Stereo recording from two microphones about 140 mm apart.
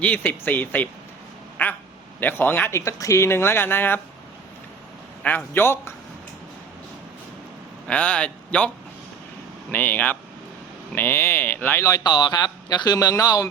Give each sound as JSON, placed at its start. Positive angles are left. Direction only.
{"t": 0.0, "sound": "speech", "side_deg": 10}
{"t": 5.2, "sound": "speech", "side_deg": 15}
{"t": 7.9, "sound": "speech", "side_deg": 10}
{"t": 9.7, "sound": "speech", "side_deg": 15}